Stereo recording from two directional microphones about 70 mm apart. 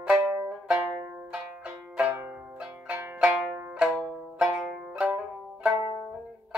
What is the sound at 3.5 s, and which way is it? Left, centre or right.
Music, right.